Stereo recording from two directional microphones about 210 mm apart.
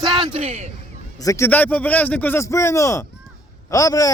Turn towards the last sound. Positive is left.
turn(degrees=15)  # may be behind; listen again after turning